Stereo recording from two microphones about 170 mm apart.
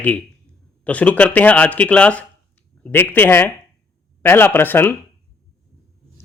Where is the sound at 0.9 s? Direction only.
10° left (ahead or behind).